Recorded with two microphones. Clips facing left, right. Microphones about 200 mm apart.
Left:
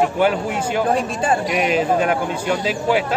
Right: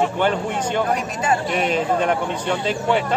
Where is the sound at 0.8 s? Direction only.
30° left (ahead or behind).